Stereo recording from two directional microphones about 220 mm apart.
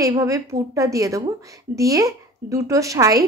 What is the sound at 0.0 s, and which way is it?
A woman's voice, 15° right (ahead or behind).